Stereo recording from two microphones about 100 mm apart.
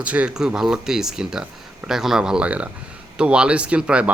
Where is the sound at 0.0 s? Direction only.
10° right (ahead or behind).